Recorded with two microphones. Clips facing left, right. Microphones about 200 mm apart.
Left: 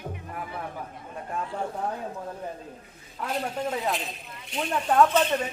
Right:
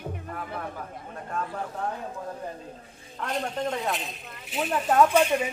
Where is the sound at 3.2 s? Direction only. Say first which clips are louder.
Even; 5° left (ahead or behind).